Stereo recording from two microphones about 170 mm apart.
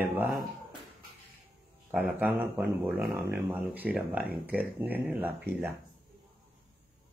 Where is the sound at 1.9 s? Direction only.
5° right (ahead or behind).